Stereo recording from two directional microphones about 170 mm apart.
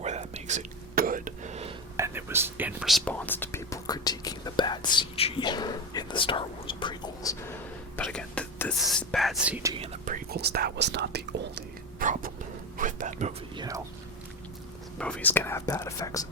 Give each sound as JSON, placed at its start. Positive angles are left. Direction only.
{"t": 0.0, "sound": "whispering", "side_deg": -40}
{"t": 2.0, "sound": "whispering", "side_deg": -15}
{"t": 7.9, "sound": "whispering", "side_deg": 10}
{"t": 8.8, "sound": "speech", "side_deg": 0}
{"t": 9.7, "sound": "whispering", "side_deg": -35}
{"t": 10.1, "sound": "whispering", "side_deg": -65}
{"t": 12.0, "sound": "a sound", "side_deg": -50}
{"t": 13.6, "sound": "whispering", "side_deg": -20}
{"t": 14.9, "sound": "speech", "side_deg": 5}